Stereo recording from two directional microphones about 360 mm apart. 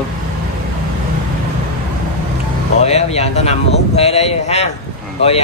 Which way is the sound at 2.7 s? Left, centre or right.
Centre.